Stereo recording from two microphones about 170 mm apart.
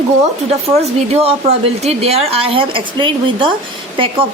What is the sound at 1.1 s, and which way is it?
A woman's voice, 35° right (ahead or behind).